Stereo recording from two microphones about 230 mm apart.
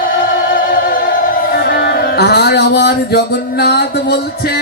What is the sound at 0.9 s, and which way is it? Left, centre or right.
Music, left.